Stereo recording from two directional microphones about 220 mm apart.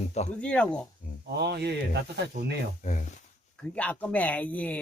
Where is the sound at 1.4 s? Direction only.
50° right (ahead or behind).